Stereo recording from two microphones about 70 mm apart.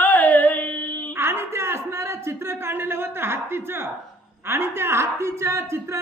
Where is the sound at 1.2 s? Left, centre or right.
Right.